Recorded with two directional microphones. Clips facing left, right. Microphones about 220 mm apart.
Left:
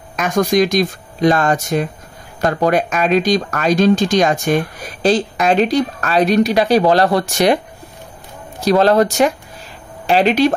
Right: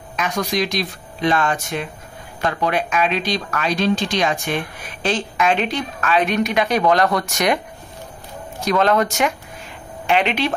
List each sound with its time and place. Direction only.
0.1 s speech: 45° left (ahead or behind)